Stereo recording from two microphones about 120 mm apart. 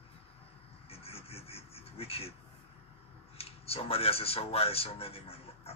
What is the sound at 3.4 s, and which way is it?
A man's voice, 55° left (ahead or behind).